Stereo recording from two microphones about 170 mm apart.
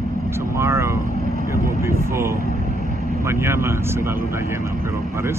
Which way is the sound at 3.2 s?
15° right (ahead or behind).